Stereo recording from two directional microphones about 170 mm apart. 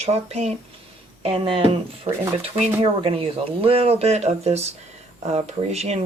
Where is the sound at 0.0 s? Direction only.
40° right (ahead or behind).